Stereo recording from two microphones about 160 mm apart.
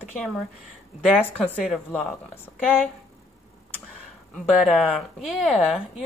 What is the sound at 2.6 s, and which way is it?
Speech, 10° left (ahead or behind).